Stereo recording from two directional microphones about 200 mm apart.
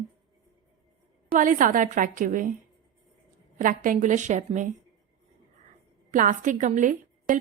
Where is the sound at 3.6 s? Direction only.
45° right (ahead or behind).